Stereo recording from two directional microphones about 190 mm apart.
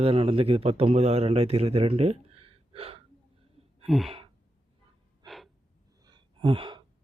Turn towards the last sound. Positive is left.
turn(degrees=-25)  # may be behind; listen again after turning